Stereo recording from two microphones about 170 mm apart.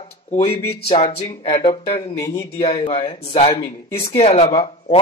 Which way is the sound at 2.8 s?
30° left (ahead or behind).